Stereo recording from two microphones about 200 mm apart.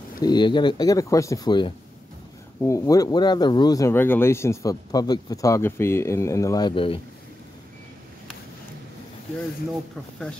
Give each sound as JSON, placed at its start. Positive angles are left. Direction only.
{"t": 0.2, "sound": "speech", "side_deg": 20}